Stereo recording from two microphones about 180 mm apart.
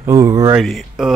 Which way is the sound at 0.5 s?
Centre (ahead or behind).